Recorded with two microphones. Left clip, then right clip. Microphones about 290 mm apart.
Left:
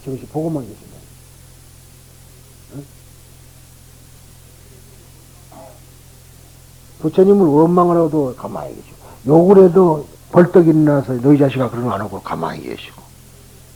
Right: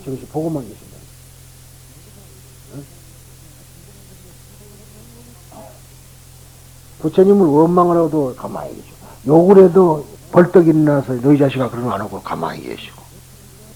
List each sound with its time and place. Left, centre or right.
0.3 s a man's voice: right
7.0 s a man's voice: right
10.3 s a man's voice: right; by 12.9 s centre